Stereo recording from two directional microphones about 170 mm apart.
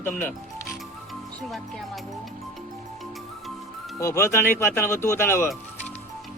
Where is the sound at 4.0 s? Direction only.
15° left (ahead or behind).